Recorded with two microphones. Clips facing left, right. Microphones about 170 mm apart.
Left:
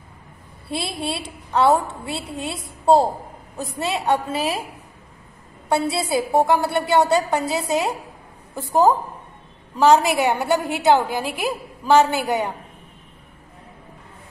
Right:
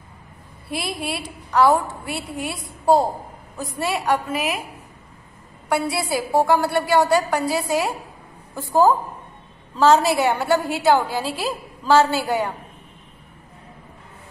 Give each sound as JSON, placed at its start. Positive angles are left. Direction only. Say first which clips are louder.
{"t": 0.7, "sound": "a woman's voice", "louder": "left 1 dB", "side_deg": 25}
{"t": 5.7, "sound": "a woman's voice", "louder": "left 1 dB", "side_deg": 25}